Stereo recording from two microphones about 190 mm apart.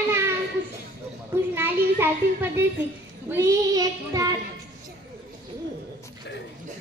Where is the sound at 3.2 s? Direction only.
15° right (ahead or behind).